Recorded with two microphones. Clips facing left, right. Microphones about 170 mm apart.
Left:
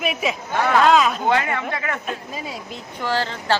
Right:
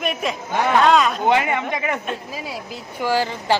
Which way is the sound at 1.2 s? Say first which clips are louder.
Right 2 dB; 20° right (ahead or behind).